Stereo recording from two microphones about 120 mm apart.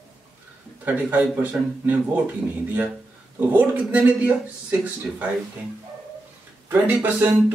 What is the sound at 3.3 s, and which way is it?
Speech, 15° right (ahead or behind).